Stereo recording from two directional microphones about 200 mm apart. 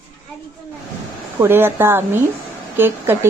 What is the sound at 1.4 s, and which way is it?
A woman's voice, 10° right (ahead or behind).